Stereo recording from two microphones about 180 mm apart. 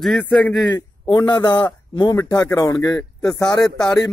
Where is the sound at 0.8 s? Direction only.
20° left (ahead or behind).